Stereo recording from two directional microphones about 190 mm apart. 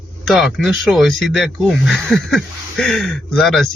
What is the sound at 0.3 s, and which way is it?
Speech, centre (ahead or behind).